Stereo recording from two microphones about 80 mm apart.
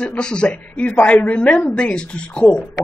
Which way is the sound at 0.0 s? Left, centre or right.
Centre.